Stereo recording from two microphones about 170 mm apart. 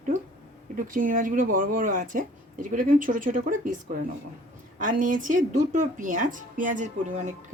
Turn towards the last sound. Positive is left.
turn(degrees=-45)  # may be behind; listen again after turning